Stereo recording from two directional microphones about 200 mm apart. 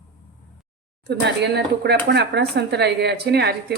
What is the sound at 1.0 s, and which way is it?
Speech, 55° right (ahead or behind).